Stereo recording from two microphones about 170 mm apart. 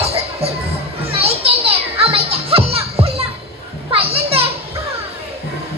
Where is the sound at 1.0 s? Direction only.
35° right (ahead or behind).